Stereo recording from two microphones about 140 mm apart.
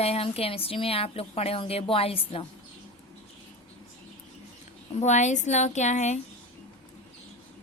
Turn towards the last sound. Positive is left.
turn(degrees=55)  # may be behind; listen again after turning